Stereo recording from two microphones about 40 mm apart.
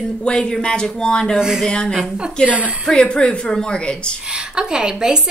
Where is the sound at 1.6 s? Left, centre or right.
Centre.